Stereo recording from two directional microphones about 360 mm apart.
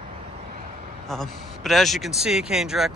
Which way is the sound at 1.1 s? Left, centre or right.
Centre.